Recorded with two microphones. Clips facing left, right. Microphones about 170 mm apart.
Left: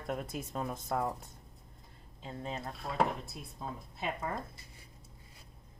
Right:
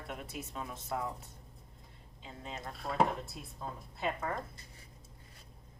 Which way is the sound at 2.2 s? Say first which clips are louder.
Left 5 dB; 35° left (ahead or behind).